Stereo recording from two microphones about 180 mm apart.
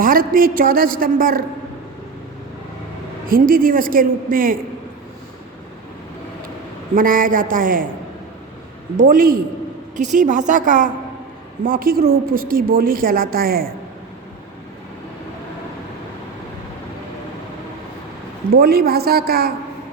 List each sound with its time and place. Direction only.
0.0 s a woman's voice: 50° right (ahead or behind)
3.2 s a woman's voice: 50° right (ahead or behind)
6.9 s a woman's voice: 50° right (ahead or behind)
9.0 s a woman's voice: 50° right (ahead or behind)
18.5 s a woman's voice: 60° right (ahead or behind)